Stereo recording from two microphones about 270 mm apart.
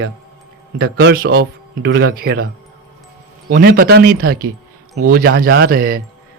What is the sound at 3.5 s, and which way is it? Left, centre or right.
Speech, right.